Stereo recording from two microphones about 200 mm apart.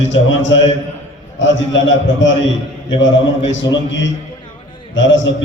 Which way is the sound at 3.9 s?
65° left (ahead or behind).